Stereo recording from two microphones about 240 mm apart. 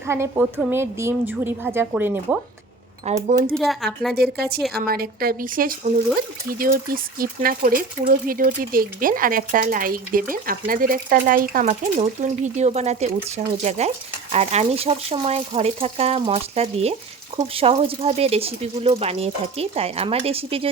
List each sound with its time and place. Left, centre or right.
0.1 s a woman's voice: centre
3.1 s speech: right
3.5 s speech: centre
4.1 s speech: right